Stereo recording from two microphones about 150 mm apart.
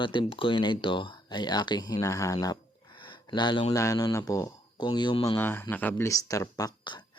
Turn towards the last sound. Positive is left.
turn(degrees=30)  # may be behind; listen again after turning